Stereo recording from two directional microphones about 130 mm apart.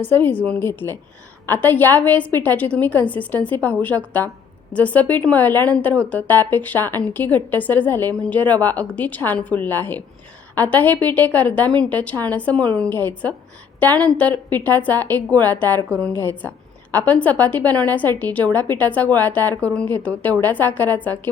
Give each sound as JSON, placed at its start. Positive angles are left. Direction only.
{"t": 0.1, "sound": "speech", "side_deg": 15}